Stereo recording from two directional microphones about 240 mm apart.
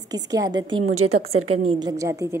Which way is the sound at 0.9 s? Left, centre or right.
Right.